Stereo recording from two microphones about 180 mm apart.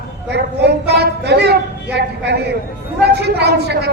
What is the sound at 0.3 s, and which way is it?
A woman's voice, 65° right (ahead or behind).